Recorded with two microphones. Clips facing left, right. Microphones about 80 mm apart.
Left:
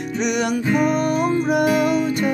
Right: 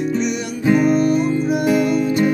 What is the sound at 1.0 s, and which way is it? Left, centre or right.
Music, left.